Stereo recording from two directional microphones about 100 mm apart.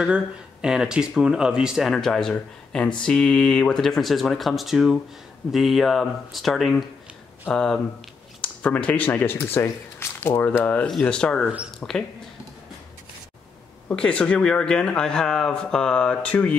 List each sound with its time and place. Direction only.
0.0 s speech: 5° right (ahead or behind); by 10.9 s 15° left (ahead or behind)
10.9 s speech: 5° left (ahead or behind)
13.8 s speech: 10° left (ahead or behind)